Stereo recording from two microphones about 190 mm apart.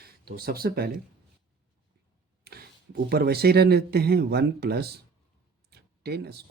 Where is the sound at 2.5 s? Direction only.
55° right (ahead or behind).